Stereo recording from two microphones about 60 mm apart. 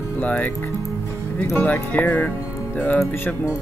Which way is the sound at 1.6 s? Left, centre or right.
Left.